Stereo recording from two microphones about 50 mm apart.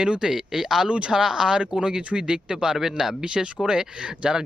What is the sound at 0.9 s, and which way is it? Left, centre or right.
Speech, right.